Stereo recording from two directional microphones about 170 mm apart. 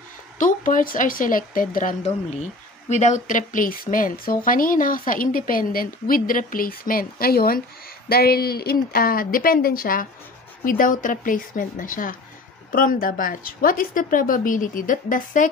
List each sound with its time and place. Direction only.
0.4 s a woman's voice: 50° left (ahead or behind)